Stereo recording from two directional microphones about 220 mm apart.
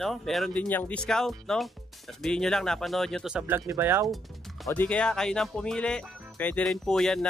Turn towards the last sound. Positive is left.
turn(degrees=0)  # may be behind; listen again after turning